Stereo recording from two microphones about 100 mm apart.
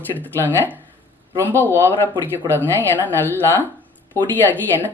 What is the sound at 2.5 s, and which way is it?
Speech, 20° left (ahead or behind).